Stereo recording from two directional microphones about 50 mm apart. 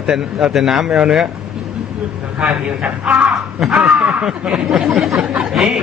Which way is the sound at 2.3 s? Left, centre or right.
Centre.